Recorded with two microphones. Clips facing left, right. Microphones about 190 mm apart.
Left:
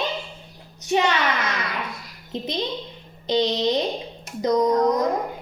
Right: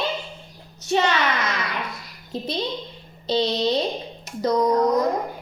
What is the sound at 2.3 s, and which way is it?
A woman's voice, 20° left (ahead or behind).